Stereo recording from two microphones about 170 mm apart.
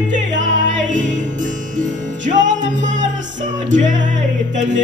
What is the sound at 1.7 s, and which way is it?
Music, 45° right (ahead or behind).